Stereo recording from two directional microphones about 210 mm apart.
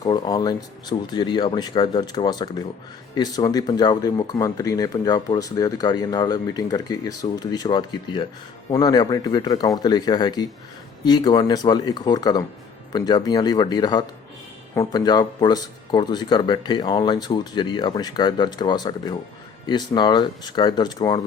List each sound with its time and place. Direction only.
0.0 s speech: 20° left (ahead or behind)